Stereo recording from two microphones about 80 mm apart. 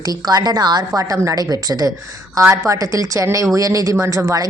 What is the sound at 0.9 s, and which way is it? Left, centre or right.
Speech, right.